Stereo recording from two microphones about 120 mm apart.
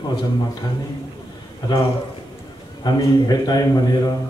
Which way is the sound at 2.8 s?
35° left (ahead or behind).